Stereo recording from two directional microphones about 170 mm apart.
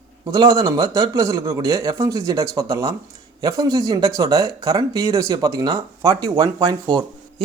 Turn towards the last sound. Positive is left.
turn(degrees=-25)  # may be behind; listen again after turning